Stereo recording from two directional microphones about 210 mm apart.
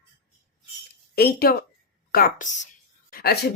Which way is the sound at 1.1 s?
45° left (ahead or behind).